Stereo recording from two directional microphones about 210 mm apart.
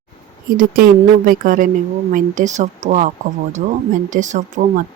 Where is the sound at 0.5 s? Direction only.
40° right (ahead or behind).